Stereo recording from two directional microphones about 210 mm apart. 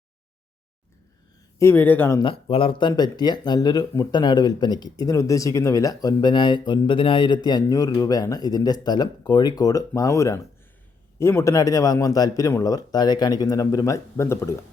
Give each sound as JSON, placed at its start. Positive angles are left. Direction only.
{"t": 1.5, "sound": "speech", "side_deg": 10}